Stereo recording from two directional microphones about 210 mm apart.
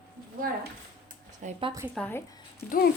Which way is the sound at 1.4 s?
25° right (ahead or behind).